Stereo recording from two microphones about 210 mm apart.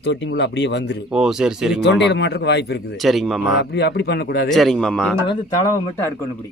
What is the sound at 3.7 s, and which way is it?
Speech, 50° left (ahead or behind).